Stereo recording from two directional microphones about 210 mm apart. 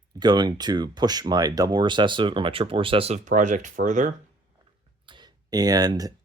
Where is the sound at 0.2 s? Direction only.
20° right (ahead or behind); by 4.1 s 35° right (ahead or behind).